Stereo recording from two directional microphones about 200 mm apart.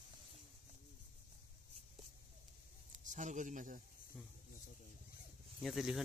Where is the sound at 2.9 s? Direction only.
40° right (ahead or behind).